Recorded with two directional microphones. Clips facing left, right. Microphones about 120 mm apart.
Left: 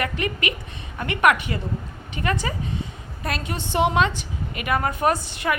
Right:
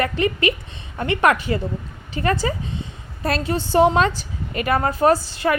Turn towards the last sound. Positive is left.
turn(degrees=-30)  # may be behind; listen again after turning